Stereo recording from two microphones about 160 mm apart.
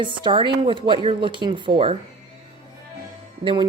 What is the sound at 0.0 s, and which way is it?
Speech, 30° right (ahead or behind).